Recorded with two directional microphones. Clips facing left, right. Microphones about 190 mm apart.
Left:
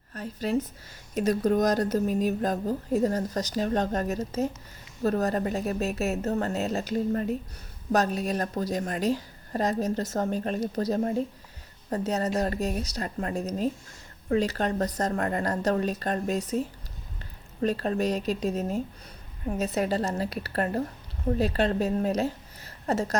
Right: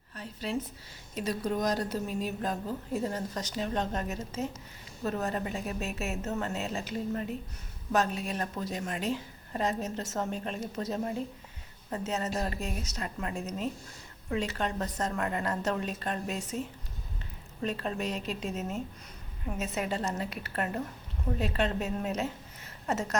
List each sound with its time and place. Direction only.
0.1 s a woman's voice: 45° left (ahead or behind)